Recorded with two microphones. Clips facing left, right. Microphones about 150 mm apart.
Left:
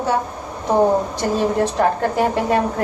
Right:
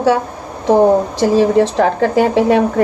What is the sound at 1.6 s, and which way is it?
A woman's voice, 80° right.